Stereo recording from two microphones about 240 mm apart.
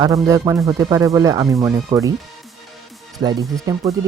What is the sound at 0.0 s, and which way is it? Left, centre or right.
Speech, centre.